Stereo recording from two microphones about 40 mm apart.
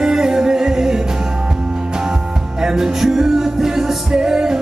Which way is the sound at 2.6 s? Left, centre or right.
Centre.